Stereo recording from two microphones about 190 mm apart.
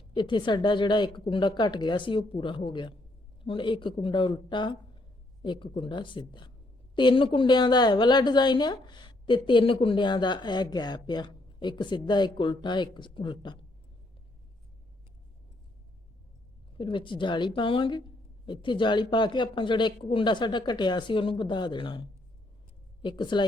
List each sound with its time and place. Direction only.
0.1 s a woman's voice: 25° left (ahead or behind)
16.7 s a woman's voice: 25° left (ahead or behind)